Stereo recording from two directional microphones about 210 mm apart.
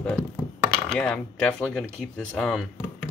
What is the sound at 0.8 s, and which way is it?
Speech, 5° left (ahead or behind).